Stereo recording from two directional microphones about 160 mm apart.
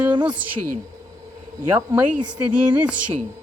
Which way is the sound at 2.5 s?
5° right (ahead or behind).